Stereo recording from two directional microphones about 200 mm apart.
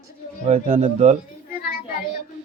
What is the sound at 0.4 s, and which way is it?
Speech, 35° right (ahead or behind).